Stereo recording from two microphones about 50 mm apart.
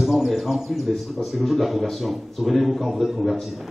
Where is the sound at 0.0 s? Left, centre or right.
Centre.